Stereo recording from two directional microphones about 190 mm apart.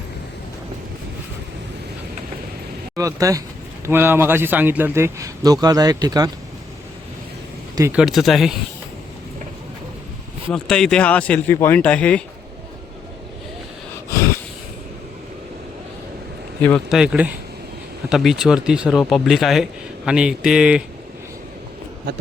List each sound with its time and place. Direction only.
2.9 s a man's voice: 15° right (ahead or behind)
7.9 s speech: centre (ahead or behind)
10.5 s speech: 5° left (ahead or behind)
16.6 s speech: 5° left (ahead or behind)